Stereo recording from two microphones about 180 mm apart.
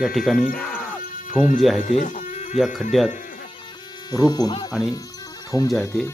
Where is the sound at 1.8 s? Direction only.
45° left (ahead or behind).